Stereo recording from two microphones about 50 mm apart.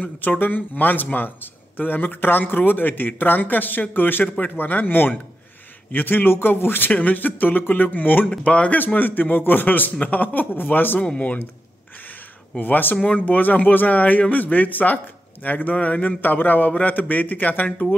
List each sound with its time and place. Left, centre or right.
0.0 s a man's voice: left
6.9 s a man's voice: left
11.0 s speech: left
12.5 s a man's voice: left